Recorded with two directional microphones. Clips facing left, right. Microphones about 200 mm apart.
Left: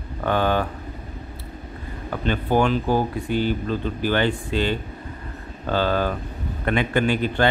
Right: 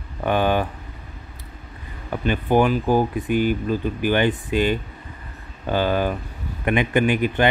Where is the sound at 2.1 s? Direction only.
15° right (ahead or behind).